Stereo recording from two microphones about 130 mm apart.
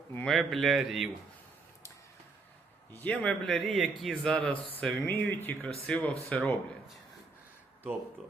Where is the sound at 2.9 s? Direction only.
10° left (ahead or behind).